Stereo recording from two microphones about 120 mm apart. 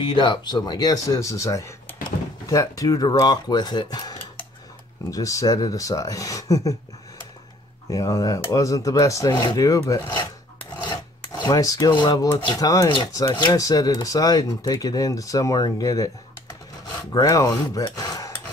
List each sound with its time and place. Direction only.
0.0 s speech: 40° left (ahead or behind)
7.9 s speech: 30° left (ahead or behind)
10.8 s filing: 40° left (ahead or behind)
11.9 s speech: 40° left (ahead or behind)
12.5 s speech: 30° left (ahead or behind)
13.6 s speech: 30° left (ahead or behind)
17.1 s a sound: 30° left (ahead or behind)